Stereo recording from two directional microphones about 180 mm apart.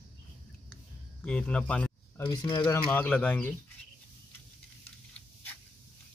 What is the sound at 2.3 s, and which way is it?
Speech, 25° left (ahead or behind).